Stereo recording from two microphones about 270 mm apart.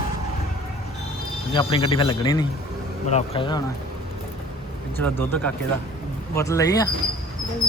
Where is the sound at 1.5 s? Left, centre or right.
Centre.